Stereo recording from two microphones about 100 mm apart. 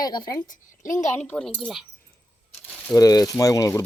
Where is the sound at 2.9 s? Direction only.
40° left (ahead or behind).